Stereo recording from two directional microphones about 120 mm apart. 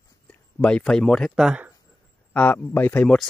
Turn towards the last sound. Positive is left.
turn(degrees=5)  # may be behind; listen again after turning